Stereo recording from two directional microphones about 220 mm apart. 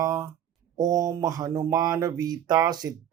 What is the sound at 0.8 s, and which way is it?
Speech, 15° right (ahead or behind).